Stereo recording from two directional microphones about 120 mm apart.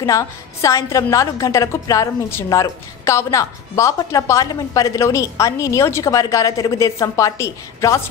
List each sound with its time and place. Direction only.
0.0 s a woman's voice: 25° left (ahead or behind)